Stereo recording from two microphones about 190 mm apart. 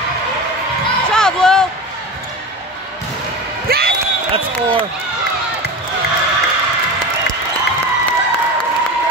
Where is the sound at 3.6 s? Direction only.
55° right (ahead or behind).